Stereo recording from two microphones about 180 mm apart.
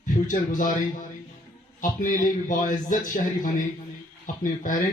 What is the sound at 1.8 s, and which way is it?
Speech, 50° left (ahead or behind).